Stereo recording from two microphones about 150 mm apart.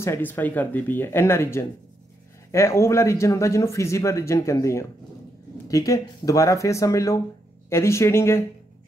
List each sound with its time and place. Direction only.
0.0 s speech: 15° left (ahead or behind)